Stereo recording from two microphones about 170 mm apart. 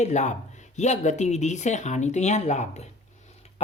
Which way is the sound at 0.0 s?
45° left (ahead or behind).